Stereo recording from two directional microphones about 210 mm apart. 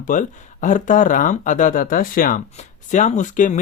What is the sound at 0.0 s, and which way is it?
Speech, 40° left (ahead or behind).